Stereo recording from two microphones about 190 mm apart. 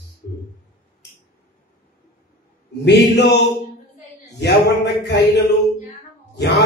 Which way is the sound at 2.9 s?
60° left (ahead or behind).